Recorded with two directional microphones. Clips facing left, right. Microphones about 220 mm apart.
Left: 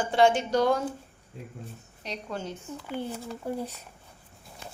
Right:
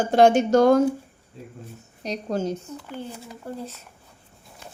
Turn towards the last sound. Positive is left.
turn(degrees=10)  # may be behind; listen again after turning